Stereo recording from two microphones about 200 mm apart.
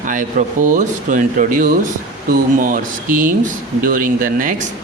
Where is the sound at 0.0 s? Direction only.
40° right (ahead or behind).